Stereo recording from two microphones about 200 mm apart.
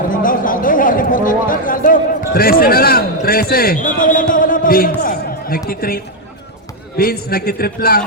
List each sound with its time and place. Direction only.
0.1 s speech: 45° left (ahead or behind)